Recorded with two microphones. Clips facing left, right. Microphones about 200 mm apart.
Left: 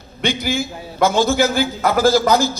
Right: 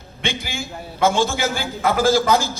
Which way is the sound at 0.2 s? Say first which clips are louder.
Left 7 dB; 40° left (ahead or behind).